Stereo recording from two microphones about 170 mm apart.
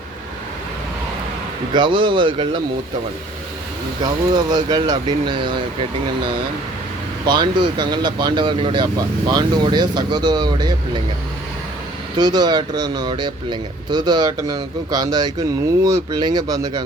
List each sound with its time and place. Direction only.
1.7 s speech: 25° right (ahead or behind)
4.0 s speech: 25° right (ahead or behind)
12.1 s speech: 25° right (ahead or behind)